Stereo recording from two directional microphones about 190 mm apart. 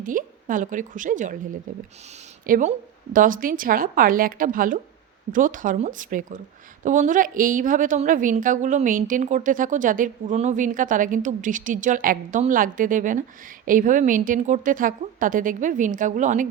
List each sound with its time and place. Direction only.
0.0 s a woman's voice: 45° right (ahead or behind)
2.5 s a woman's voice: 45° right (ahead or behind)